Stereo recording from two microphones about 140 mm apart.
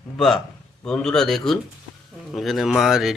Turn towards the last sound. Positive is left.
turn(degrees=0)  # may be behind; listen again after turning